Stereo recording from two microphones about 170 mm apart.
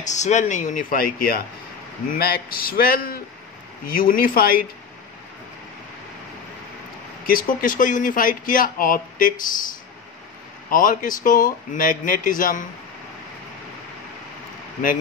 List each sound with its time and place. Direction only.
0.0 s a man's voice: 45° left (ahead or behind)
7.2 s speech: 55° left (ahead or behind)
10.7 s speech: 50° left (ahead or behind)